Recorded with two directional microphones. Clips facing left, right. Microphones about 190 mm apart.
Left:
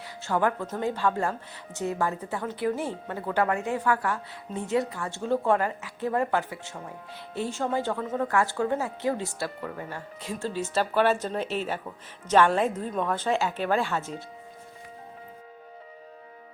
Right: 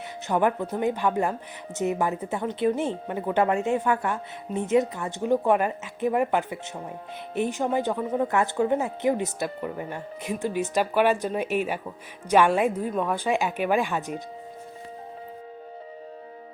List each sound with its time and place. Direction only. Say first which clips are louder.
0.3 s a woman's voice: right 3 dB; 20° right (ahead or behind)